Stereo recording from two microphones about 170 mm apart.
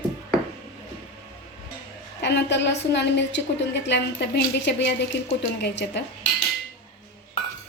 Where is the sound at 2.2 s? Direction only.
90° left.